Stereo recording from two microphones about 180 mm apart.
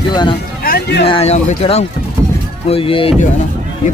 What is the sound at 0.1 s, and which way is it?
Speech, 25° left (ahead or behind).